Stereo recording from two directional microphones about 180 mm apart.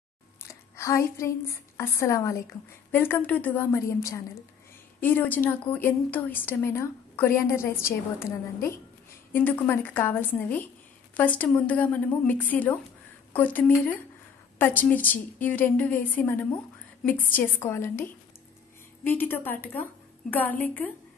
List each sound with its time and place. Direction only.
0.4 s a woman's voice: 15° left (ahead or behind)
9.3 s a woman's voice: 10° left (ahead or behind)